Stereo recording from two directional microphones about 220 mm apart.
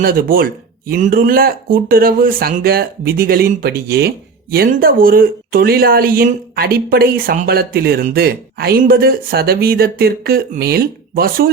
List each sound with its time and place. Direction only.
0.0 s speech: 40° right (ahead or behind)